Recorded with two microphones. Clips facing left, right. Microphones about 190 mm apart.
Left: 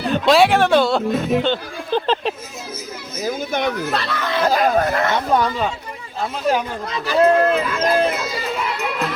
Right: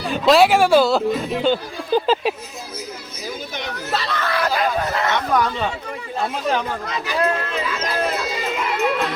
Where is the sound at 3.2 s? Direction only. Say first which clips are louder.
Left 8 dB; 50° left (ahead or behind).